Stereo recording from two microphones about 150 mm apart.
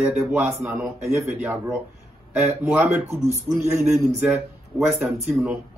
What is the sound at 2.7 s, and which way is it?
A man's voice, 10° right (ahead or behind).